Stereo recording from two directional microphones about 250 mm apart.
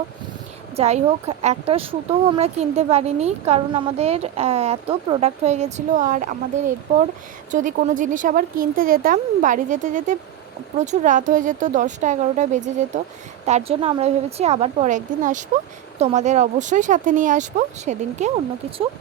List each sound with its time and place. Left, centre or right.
0.8 s a woman's voice: right